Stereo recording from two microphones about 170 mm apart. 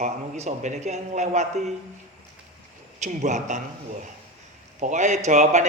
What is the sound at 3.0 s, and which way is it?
Speech, 45° right (ahead or behind).